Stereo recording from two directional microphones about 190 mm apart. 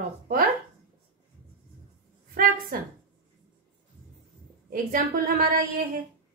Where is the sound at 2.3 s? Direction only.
45° right (ahead or behind).